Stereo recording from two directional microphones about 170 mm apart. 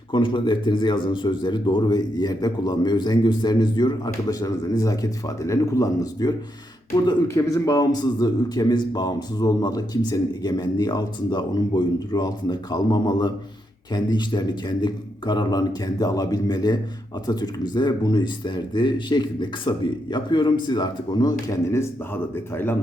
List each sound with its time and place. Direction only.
0.1 s a man's voice: 30° left (ahead or behind); by 22.7 s 15° left (ahead or behind)